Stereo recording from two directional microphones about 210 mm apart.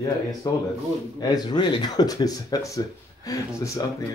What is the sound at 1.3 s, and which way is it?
Speech, 20° left (ahead or behind).